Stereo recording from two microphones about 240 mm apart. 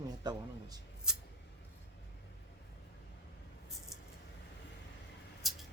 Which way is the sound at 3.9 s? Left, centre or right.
Centre.